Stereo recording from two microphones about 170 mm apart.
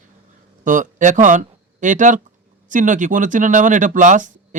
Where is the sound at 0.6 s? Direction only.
50° right (ahead or behind).